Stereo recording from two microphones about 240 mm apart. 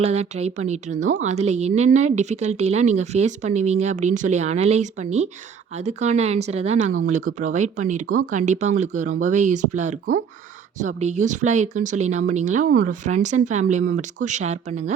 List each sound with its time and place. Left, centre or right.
0.0 s speech: right